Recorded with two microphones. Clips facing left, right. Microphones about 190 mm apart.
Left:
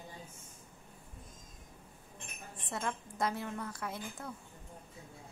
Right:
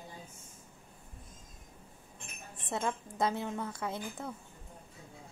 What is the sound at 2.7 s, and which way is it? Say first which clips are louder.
A woman's voice: right 4 dB; 25° right (ahead or behind).